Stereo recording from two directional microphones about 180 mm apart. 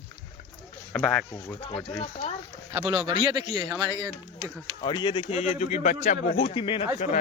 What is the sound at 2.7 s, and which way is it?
Speech, 30° right (ahead or behind).